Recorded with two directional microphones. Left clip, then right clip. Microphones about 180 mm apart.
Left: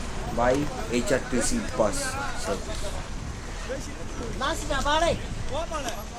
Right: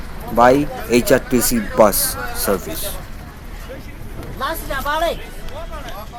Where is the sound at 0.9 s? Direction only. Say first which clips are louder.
Right 11 dB; 45° right (ahead or behind).